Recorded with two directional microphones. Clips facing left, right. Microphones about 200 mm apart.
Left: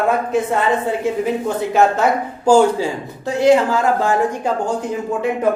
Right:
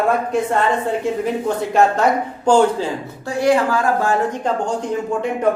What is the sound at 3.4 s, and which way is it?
Speech, 25° left (ahead or behind).